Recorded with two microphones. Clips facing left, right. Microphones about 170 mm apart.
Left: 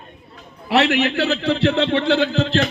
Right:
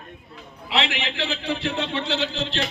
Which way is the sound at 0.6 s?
70° left (ahead or behind).